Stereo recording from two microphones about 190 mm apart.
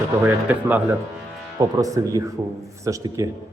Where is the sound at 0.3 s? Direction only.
10° right (ahead or behind).